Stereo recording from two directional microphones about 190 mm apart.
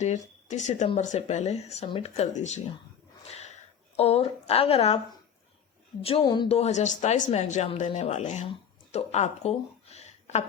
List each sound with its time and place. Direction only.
0.0 s speech: 40° left (ahead or behind)
3.2 s a sound: 35° left (ahead or behind)
6.0 s speech: 30° left (ahead or behind)